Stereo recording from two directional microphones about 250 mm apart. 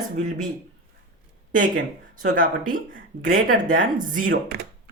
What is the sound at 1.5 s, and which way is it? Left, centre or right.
Speech, right.